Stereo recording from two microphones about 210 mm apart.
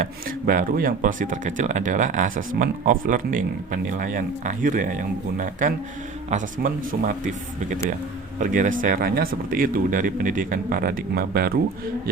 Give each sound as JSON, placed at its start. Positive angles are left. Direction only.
{"t": 0.0, "sound": "speech", "side_deg": -40}
{"t": 8.4, "sound": "speech", "side_deg": -40}